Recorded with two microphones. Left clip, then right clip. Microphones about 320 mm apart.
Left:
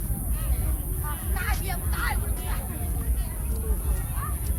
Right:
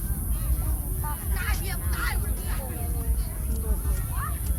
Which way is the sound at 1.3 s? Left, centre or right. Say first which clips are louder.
Left 4 dB; centre.